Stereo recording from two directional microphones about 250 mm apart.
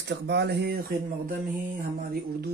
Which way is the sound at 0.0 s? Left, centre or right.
Right.